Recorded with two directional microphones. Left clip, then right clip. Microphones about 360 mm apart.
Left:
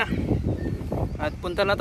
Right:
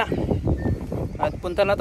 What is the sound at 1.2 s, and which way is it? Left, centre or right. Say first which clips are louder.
Speech: right 4 dB; centre.